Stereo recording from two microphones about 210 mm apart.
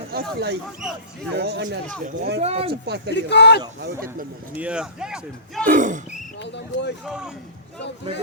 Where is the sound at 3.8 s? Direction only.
45° right (ahead or behind).